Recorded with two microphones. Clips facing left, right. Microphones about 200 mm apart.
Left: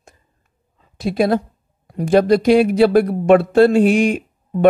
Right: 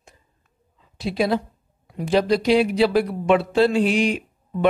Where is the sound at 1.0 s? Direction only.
50° left (ahead or behind).